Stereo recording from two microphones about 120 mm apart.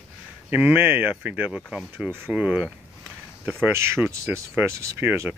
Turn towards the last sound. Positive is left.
turn(degrees=-15)  # may be behind; listen again after turning